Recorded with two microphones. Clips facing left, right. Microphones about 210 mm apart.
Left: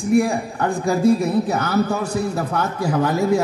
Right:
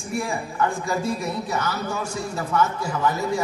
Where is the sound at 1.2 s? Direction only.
55° left (ahead or behind).